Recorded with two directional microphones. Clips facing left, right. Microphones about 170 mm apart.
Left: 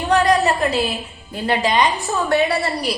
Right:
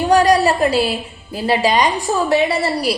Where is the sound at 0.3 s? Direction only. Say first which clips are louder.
Right 3 dB; 10° right (ahead or behind).